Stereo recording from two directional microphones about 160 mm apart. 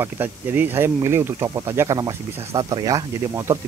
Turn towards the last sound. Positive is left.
turn(degrees=-15)  # may be behind; listen again after turning